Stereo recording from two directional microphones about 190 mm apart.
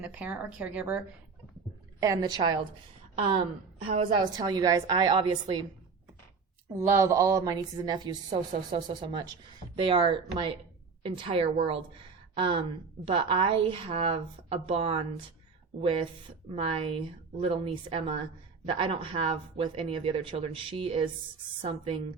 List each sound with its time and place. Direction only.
0.0 s speech: 5° right (ahead or behind)
2.0 s speech: 15° right (ahead or behind)
3.9 s speech: 25° right (ahead or behind)
6.7 s speech: 15° right (ahead or behind)